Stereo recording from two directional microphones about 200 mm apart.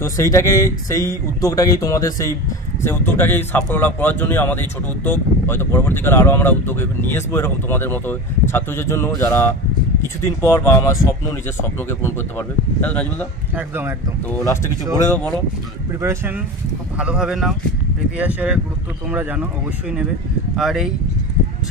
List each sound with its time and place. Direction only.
0.0 s a man's voice: 15° left (ahead or behind)
13.6 s speech: 10° right (ahead or behind)
15.0 s a man's voice: 5° left (ahead or behind)
16.0 s speech: 15° right (ahead or behind)
20.5 s speech: centre (ahead or behind)